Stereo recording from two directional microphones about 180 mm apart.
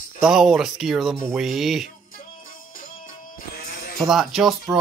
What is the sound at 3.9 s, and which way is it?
Speech, centre (ahead or behind).